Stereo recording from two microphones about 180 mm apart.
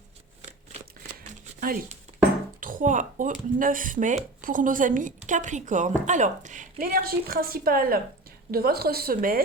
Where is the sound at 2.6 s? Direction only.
50° right (ahead or behind).